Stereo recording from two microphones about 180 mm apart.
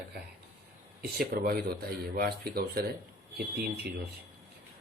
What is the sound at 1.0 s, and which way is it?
Speech, 55° right (ahead or behind).